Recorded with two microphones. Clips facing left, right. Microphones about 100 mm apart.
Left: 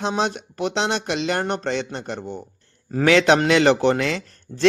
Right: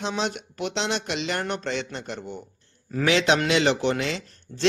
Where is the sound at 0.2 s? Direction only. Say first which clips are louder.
Left 5 dB; 40° left (ahead or behind).